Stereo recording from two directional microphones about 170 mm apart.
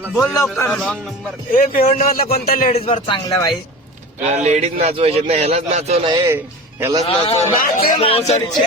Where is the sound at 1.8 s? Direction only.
40° left (ahead or behind).